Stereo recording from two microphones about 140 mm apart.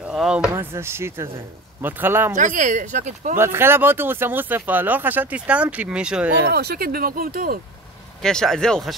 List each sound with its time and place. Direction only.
0.0 s speech: 5° right (ahead or behind)
0.6 s speech: 20° right (ahead or behind)
2.3 s speech: 65° right (ahead or behind)
3.3 s speech: 15° right (ahead or behind)
6.5 s speech: 90° right
8.2 s speech: 5° left (ahead or behind)